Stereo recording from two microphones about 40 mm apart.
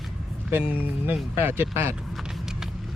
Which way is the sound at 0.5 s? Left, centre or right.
Right.